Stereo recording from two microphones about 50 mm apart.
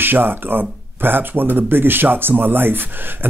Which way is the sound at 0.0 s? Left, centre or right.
Right.